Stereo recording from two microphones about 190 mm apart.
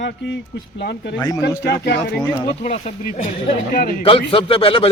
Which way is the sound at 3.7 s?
45° left (ahead or behind).